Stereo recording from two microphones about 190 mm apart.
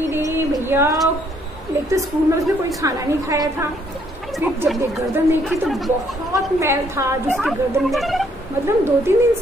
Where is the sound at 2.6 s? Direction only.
15° right (ahead or behind).